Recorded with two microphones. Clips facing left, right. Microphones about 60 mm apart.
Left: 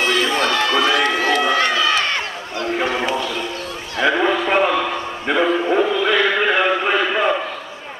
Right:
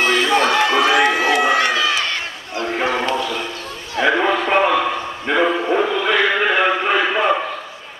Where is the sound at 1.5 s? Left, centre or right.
Right.